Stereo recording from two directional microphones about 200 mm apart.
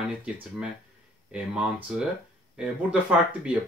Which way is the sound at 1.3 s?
5° right (ahead or behind).